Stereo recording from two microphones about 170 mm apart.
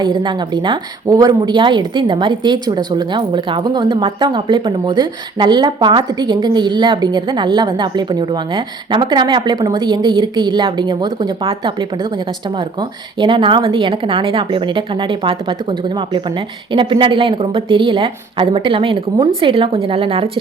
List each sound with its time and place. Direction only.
0.0 s a woman's voice: 25° right (ahead or behind)